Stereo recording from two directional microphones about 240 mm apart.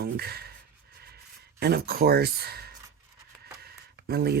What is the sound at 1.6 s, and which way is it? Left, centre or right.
Speech, right.